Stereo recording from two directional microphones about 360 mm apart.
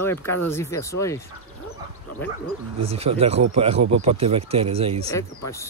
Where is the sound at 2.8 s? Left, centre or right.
Centre.